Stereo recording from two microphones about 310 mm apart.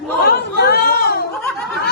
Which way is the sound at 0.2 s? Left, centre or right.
Left.